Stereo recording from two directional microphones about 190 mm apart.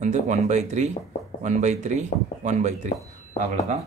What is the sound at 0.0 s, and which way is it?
Speech, 35° right (ahead or behind).